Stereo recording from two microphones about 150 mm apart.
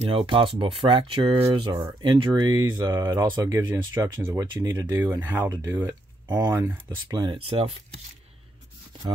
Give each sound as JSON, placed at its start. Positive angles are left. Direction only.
{"t": 0.0, "sound": "speech", "side_deg": -40}
{"t": 7.1, "sound": "speech", "side_deg": -25}
{"t": 7.3, "sound": "speech", "side_deg": -40}